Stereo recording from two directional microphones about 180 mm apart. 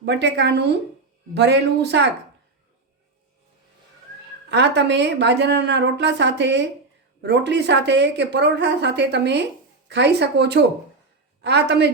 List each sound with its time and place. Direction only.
0.0 s a woman's voice: 70° right (ahead or behind)
4.4 s a woman's voice: 70° right (ahead or behind)